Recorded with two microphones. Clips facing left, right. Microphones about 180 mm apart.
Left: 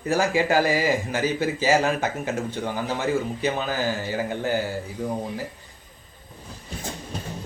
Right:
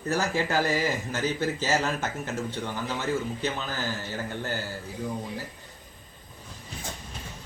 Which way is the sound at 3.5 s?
65° left (ahead or behind).